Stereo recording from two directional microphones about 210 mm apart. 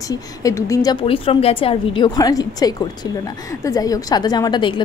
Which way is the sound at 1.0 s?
25° left (ahead or behind).